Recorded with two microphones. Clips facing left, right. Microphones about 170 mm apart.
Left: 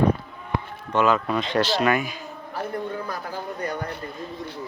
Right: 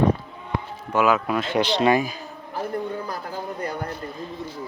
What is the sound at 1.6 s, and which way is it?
Speech, 25° right (ahead or behind).